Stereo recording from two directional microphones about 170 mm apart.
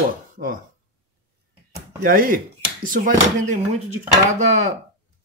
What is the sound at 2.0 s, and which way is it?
Speech, 55° right (ahead or behind).